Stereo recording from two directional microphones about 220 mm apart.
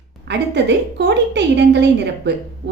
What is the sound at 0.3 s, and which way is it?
A woman's voice, 50° right (ahead or behind).